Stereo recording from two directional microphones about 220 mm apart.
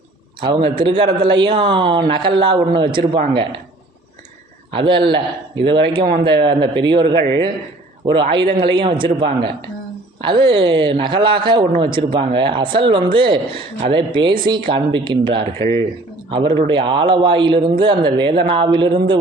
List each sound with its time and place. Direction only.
0.3 s a man's voice: 25° right (ahead or behind)
4.7 s a man's voice: 25° right (ahead or behind)
16.5 s a man's voice: 20° right (ahead or behind)